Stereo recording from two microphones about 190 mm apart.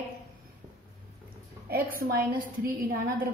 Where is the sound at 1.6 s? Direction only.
50° right (ahead or behind).